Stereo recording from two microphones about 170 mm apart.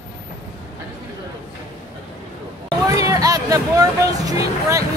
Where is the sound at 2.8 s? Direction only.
20° right (ahead or behind).